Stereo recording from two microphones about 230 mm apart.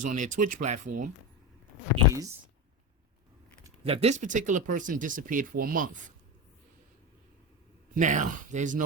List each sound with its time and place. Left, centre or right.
0.0 s speech: right
3.8 s speech: right
7.9 s speech: right